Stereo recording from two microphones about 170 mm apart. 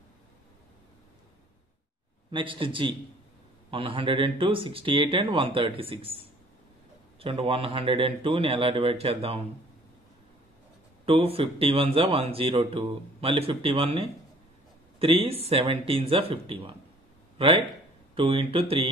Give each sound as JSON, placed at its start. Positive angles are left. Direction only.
{"t": 2.3, "sound": "speech", "side_deg": -30}
{"t": 7.2, "sound": "speech", "side_deg": -35}
{"t": 11.1, "sound": "a man's voice", "side_deg": -35}